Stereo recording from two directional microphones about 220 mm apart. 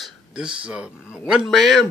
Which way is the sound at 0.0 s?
5° right (ahead or behind).